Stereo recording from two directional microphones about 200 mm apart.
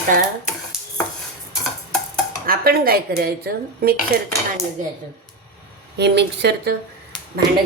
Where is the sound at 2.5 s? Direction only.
50° right (ahead or behind).